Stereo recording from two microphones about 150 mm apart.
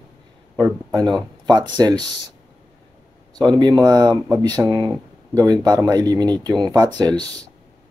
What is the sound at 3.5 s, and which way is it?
Speech, 30° right (ahead or behind).